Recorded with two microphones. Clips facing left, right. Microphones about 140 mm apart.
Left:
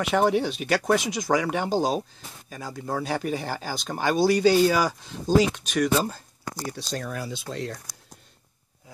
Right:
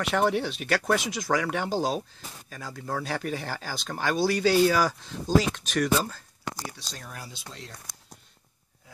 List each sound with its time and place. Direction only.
0.0 s speech: 5° left (ahead or behind)
1.2 s speech: 10° left (ahead or behind)
6.9 s speech: 85° left